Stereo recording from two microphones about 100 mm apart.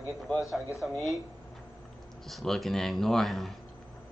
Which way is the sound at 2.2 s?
Centre (ahead or behind).